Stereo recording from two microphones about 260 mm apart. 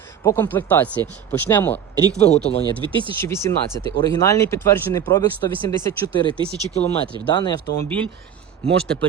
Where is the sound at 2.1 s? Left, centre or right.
Left.